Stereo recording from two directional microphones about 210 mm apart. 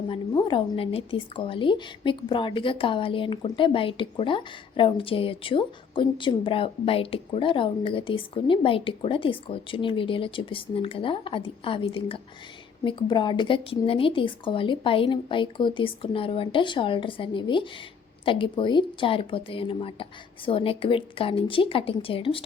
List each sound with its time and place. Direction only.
0.1 s a woman's voice: 25° left (ahead or behind)